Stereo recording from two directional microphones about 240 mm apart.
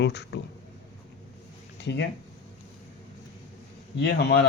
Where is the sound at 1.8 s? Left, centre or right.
Left.